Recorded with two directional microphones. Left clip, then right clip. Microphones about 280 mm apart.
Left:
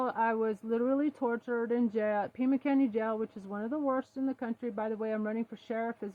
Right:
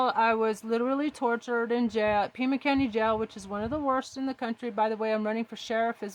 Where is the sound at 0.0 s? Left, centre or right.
Centre.